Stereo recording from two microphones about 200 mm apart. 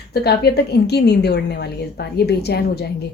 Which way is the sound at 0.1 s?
50° left (ahead or behind).